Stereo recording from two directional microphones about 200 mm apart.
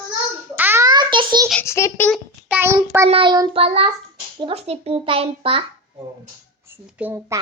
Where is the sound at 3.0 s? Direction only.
25° right (ahead or behind).